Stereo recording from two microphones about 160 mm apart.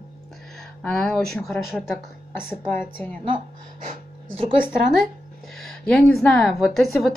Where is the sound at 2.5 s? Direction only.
15° left (ahead or behind).